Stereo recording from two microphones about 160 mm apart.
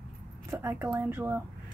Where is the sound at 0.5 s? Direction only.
15° right (ahead or behind).